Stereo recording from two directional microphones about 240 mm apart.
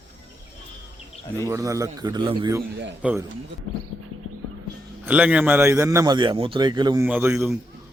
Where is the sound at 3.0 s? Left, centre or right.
Centre.